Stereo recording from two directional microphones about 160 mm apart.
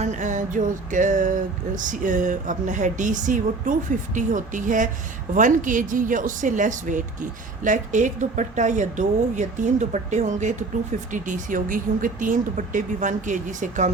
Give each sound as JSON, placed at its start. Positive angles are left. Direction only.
{"t": 0.0, "sound": "speech", "side_deg": -50}